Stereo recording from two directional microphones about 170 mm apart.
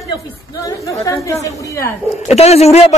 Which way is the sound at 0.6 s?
20° left (ahead or behind).